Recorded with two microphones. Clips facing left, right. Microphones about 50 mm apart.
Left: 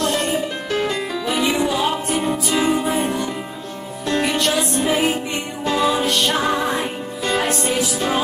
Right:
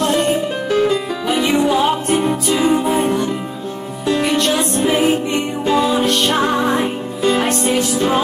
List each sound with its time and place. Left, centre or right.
0.0 s music: right
0.7 s music: centre